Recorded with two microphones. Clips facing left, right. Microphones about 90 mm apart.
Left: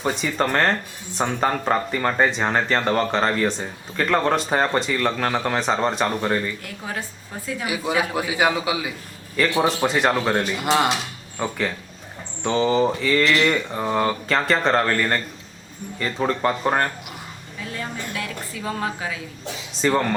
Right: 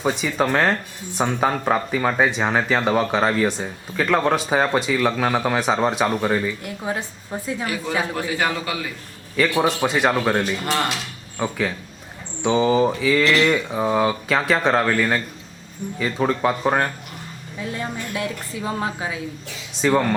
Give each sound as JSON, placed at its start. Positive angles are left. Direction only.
{"t": 0.0, "sound": "speech", "side_deg": -5}
{"t": 6.8, "sound": "speech", "side_deg": -25}
{"t": 7.6, "sound": "a man's voice", "side_deg": 10}
{"t": 9.6, "sound": "speech", "side_deg": 0}
{"t": 10.7, "sound": "a man's voice", "side_deg": 20}
{"t": 11.3, "sound": "speech", "side_deg": 0}
{"t": 17.6, "sound": "speech", "side_deg": -25}
{"t": 19.7, "sound": "speech", "side_deg": 0}